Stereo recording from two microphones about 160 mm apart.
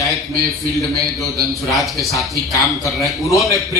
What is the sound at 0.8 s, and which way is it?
A man's voice, centre (ahead or behind).